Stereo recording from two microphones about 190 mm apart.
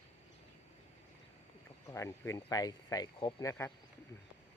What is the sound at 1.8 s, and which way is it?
Speech, 15° left (ahead or behind).